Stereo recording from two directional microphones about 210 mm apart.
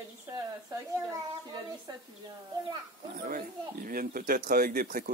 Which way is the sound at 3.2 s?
40° right (ahead or behind).